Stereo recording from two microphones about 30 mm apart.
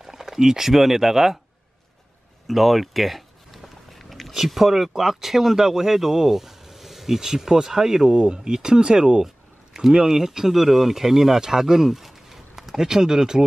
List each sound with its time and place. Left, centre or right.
0.0 s speech: centre
2.4 s a sound: centre
4.5 s speech: centre
8.2 s speech: right
10.0 s speech: centre